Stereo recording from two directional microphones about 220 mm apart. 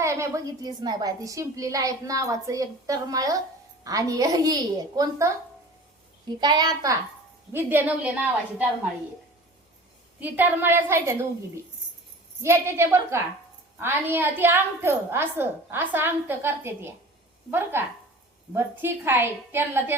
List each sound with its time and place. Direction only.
0.0 s a woman's voice: 15° right (ahead or behind)
10.2 s a woman's voice: 10° right (ahead or behind)